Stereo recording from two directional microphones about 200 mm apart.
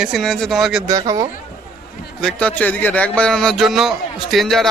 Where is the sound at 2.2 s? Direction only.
5° left (ahead or behind).